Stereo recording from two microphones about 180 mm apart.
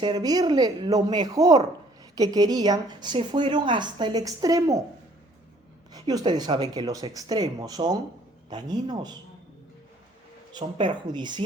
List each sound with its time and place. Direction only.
0.0 s speech: 25° right (ahead or behind)
5.9 s speech: 20° right (ahead or behind)
10.5 s speech: 25° right (ahead or behind)